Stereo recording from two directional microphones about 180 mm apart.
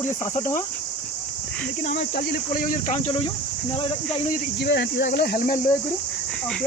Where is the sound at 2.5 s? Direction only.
50° left (ahead or behind).